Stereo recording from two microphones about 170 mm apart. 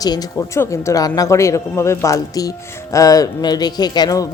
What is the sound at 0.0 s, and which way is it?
Speech, 20° left (ahead or behind).